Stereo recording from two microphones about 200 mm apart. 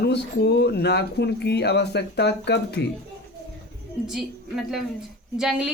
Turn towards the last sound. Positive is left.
turn(degrees=-5)  # may be behind; listen again after turning